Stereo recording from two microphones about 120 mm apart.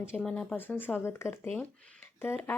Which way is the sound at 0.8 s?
20° left (ahead or behind).